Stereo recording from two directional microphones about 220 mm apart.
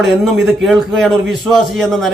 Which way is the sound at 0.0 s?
Centre (ahead or behind).